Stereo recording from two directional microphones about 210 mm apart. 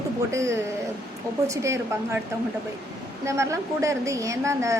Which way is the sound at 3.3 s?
15° right (ahead or behind).